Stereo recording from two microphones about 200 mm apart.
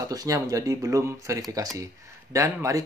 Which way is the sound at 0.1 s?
20° right (ahead or behind).